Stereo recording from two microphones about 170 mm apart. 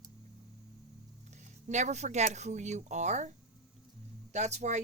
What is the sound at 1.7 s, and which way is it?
Speech, 45° right (ahead or behind).